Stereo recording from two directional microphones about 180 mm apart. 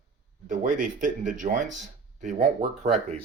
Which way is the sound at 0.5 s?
45° right (ahead or behind).